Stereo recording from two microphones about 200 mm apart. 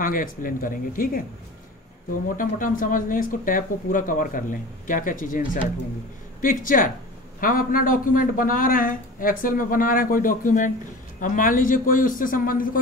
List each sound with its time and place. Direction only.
0.0 s a man's voice: 45° left (ahead or behind)
2.3 s speech: 40° left (ahead or behind)
6.4 s a man's voice: 40° left (ahead or behind)